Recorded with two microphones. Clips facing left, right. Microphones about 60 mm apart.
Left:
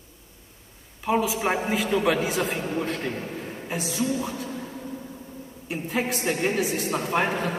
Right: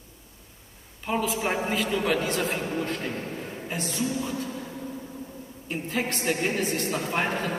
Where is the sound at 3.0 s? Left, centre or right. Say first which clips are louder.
Left 2 dB; left.